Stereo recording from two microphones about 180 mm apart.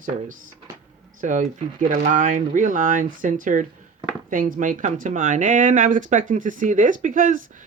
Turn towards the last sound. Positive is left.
turn(degrees=-50)  # may be behind; listen again after turning